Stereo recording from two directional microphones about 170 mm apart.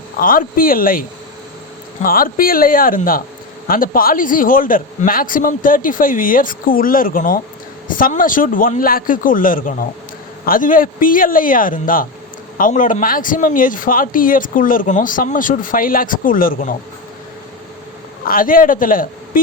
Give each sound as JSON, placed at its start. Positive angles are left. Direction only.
{"t": 0.2, "sound": "a man's voice", "side_deg": 55}
{"t": 18.3, "sound": "a man's voice", "side_deg": 55}